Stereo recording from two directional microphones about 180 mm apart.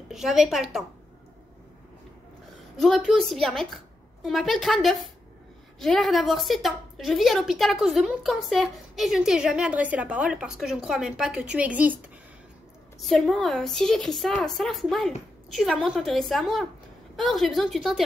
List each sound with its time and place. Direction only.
0.1 s a woman's voice: centre (ahead or behind)
2.8 s a woman's voice: centre (ahead or behind)
13.0 s a woman's voice: centre (ahead or behind)